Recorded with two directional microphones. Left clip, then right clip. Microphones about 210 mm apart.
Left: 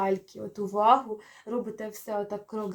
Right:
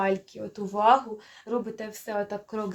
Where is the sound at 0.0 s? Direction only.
20° right (ahead or behind).